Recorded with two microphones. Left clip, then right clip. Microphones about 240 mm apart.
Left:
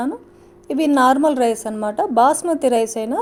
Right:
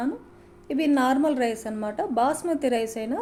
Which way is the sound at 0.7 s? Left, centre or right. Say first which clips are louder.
Left 8 dB; left.